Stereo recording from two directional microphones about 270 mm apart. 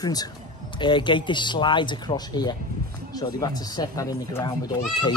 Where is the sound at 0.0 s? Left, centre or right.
Centre.